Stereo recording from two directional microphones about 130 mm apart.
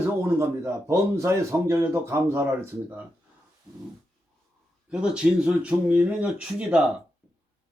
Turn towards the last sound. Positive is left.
turn(degrees=-10)  # may be behind; listen again after turning